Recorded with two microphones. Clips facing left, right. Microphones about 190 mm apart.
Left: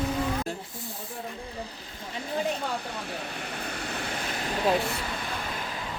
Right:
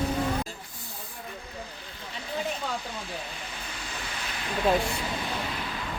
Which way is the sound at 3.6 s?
60° left (ahead or behind).